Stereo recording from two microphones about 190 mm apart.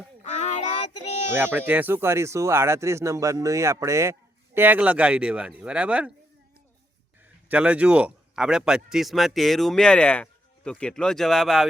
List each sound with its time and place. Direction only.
0.2 s a sound: 35° left (ahead or behind)
1.3 s speech: 10° right (ahead or behind)
7.4 s a man's voice: 5° right (ahead or behind)